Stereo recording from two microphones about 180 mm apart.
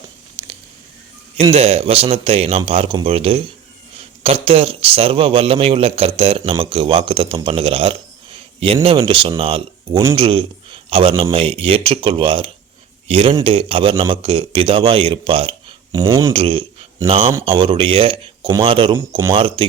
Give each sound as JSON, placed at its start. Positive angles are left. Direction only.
{"t": 1.4, "sound": "a man's voice", "side_deg": -35}
{"t": 15.9, "sound": "speech", "side_deg": -20}
{"t": 16.3, "sound": "speech", "side_deg": -30}
{"t": 17.0, "sound": "speech", "side_deg": -20}